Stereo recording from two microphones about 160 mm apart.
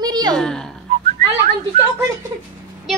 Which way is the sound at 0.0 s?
25° right (ahead or behind).